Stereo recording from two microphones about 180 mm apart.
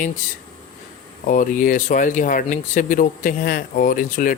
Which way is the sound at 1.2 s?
45° left (ahead or behind).